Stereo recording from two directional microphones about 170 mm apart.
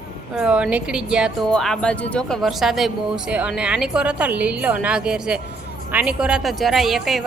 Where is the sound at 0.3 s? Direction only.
5° right (ahead or behind).